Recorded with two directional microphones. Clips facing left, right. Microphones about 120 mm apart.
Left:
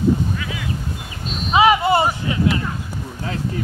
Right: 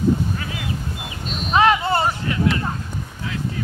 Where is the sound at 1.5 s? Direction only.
10° left (ahead or behind).